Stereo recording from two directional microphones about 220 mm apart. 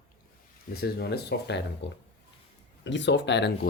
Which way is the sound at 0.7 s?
45° left (ahead or behind).